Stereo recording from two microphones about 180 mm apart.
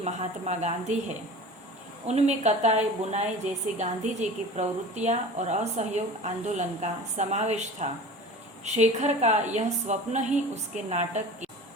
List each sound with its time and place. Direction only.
0.0 s a woman's voice: 40° right (ahead or behind)
2.0 s a woman's voice: 40° right (ahead or behind)